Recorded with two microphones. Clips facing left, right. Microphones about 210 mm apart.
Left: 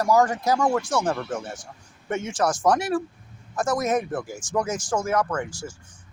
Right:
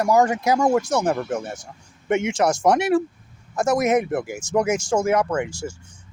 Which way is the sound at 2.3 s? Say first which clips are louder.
Right 1 dB; 25° right (ahead or behind).